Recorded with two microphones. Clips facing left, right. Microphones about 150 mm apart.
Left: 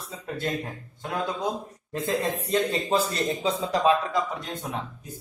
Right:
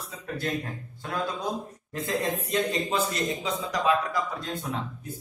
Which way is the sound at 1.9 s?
25° left (ahead or behind).